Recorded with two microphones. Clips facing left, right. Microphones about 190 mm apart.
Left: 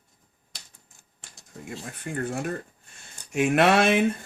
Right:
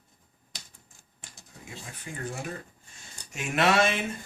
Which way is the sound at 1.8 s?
60° left (ahead or behind).